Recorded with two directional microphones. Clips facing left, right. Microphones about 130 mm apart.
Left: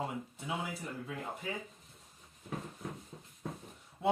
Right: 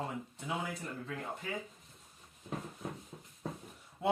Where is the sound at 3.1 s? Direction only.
15° right (ahead or behind).